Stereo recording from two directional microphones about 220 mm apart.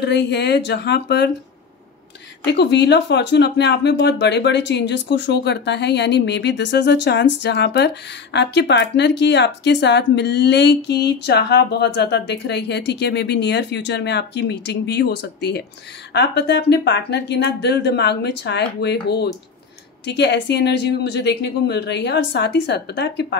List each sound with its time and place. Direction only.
0.0 s speech: 50° left (ahead or behind)
2.4 s speech: 50° left (ahead or behind)